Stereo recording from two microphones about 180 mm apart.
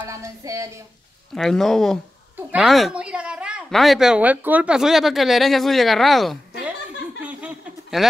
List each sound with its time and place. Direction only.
0.0 s speech: 15° right (ahead or behind)
1.3 s a woman's voice: centre (ahead or behind)
7.2 s a sound: 10° right (ahead or behind)